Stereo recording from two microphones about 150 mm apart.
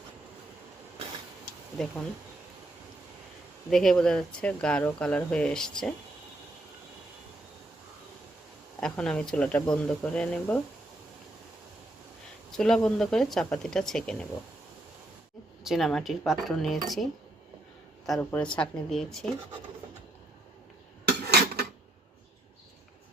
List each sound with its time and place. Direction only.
1.8 s speech: 5° left (ahead or behind)
3.7 s speech: 5° left (ahead or behind)
8.8 s speech: 5° left (ahead or behind)
12.5 s speech: 5° left (ahead or behind)
15.6 s speech: centre (ahead or behind)
18.2 s speech: 10° left (ahead or behind)
21.0 s dishes: 90° right